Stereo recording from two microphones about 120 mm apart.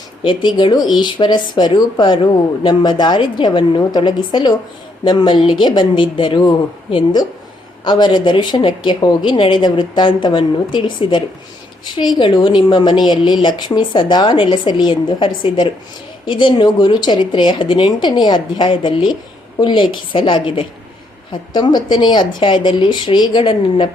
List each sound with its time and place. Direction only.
0.2 s a woman's voice: 40° left (ahead or behind)